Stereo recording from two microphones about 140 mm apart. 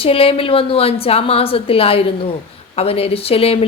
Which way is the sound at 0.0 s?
40° left (ahead or behind).